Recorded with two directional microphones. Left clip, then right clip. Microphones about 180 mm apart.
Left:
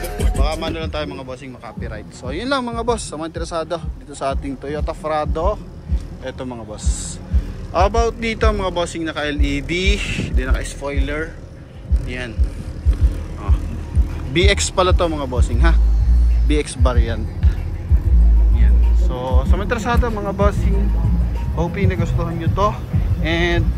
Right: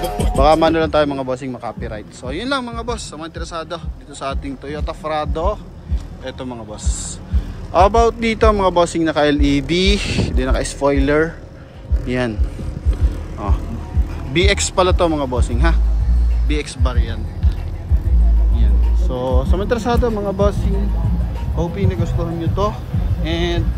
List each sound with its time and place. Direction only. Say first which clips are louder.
0.4 s a man's voice: right 13 dB; 40° right (ahead or behind)
1.7 s speech: right 4 dB; 20° right (ahead or behind)
7.7 s a man's voice: right 5 dB; 30° right (ahead or behind)
14.3 s speech: right 1 dB; 15° right (ahead or behind)
16.4 s speech: left 3 dB; centre (ahead or behind)
19.0 s speech: right 3 dB; 35° right (ahead or behind); by 23.6 s 15° right (ahead or behind)